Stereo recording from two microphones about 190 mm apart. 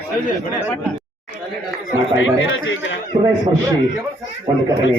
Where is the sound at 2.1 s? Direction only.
90° left.